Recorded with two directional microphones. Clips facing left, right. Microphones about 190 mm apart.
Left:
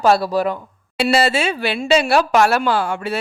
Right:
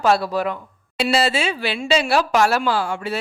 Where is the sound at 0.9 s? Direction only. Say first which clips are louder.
Left 3 dB; 60° left (ahead or behind).